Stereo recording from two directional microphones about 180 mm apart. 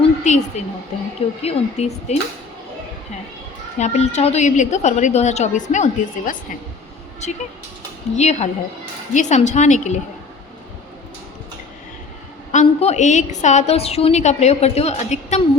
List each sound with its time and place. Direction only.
0.0 s a sound: 40° left (ahead or behind)
1.4 s a woman's voice: 35° left (ahead or behind)
3.8 s a woman's voice: 40° left (ahead or behind)
8.1 s a woman's voice: 40° left (ahead or behind)
12.5 s a woman's voice: 40° left (ahead or behind)